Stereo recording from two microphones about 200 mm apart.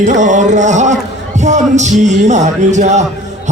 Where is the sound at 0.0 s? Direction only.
35° right (ahead or behind).